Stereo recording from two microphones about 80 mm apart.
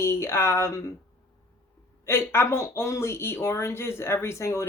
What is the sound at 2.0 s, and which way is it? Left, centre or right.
Speech, left.